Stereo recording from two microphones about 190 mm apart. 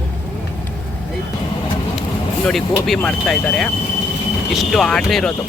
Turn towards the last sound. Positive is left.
turn(degrees=5)  # may be behind; listen again after turning